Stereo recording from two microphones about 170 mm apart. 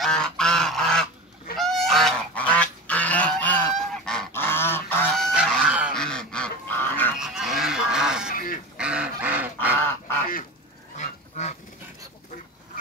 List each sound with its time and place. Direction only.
0.0 s goose: 5° left (ahead or behind)
5.1 s goose: centre (ahead or behind)
7.2 s goose: 5° right (ahead or behind)
8.3 s goose: 55° left (ahead or behind)
8.7 s goose: 5° right (ahead or behind)